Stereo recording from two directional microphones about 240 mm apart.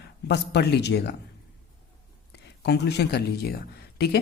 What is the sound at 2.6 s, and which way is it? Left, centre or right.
Speech, left.